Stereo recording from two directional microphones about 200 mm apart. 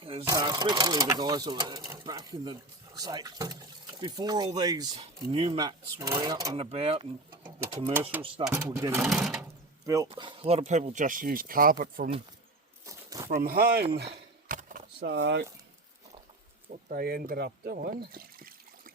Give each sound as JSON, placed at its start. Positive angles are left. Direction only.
{"t": 0.0, "sound": "a sound", "side_deg": -30}
{"t": 0.3, "sound": "speech", "side_deg": -20}
{"t": 6.6, "sound": "speech", "side_deg": -30}
{"t": 8.4, "sound": "speech", "side_deg": -15}
{"t": 9.0, "sound": "speech", "side_deg": 0}
{"t": 9.4, "sound": "door", "side_deg": -15}
{"t": 10.1, "sound": "speech", "side_deg": -25}
{"t": 12.8, "sound": "bird flight", "side_deg": -15}
{"t": 13.3, "sound": "speech", "side_deg": -50}
{"t": 13.9, "sound": "a sound", "side_deg": -55}
{"t": 16.9, "sound": "speech", "side_deg": -50}